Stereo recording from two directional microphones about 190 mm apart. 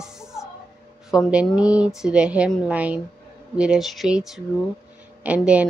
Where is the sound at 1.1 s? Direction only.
5° right (ahead or behind).